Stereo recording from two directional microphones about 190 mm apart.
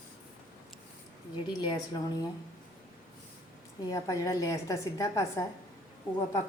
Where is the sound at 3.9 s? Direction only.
15° left (ahead or behind).